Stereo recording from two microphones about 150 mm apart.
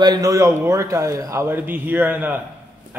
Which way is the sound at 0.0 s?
25° right (ahead or behind).